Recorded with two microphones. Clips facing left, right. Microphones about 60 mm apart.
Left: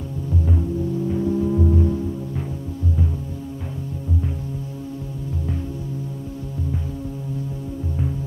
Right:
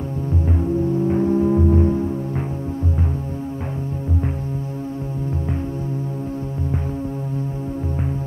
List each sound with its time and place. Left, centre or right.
0.6 s music: right